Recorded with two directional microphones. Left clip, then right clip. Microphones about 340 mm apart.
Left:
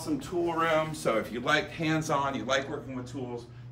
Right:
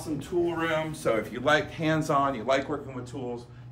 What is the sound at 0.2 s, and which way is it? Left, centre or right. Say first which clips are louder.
Speech: right 2 dB; centre.